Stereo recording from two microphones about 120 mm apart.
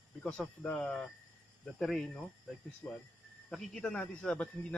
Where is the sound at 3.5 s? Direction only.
5° left (ahead or behind).